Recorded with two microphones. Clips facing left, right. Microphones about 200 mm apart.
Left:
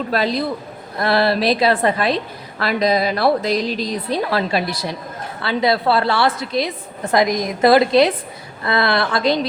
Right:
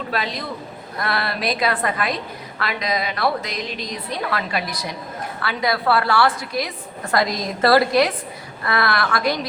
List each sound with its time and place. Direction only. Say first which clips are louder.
0.1 s a woman's voice: left 8 dB; 35° left (ahead or behind)